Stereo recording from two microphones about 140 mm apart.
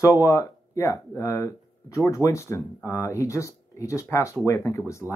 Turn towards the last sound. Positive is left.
turn(degrees=20)  # may be behind; listen again after turning